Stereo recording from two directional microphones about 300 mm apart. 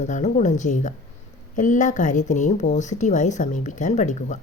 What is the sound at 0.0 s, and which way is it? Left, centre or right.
Speech, left.